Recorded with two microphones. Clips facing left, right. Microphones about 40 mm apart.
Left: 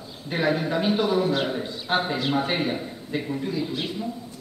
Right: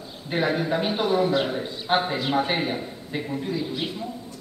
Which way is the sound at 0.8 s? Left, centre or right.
Centre.